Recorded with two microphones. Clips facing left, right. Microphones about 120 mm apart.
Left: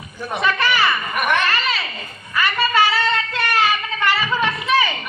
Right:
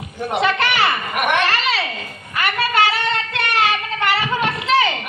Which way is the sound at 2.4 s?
60° right (ahead or behind).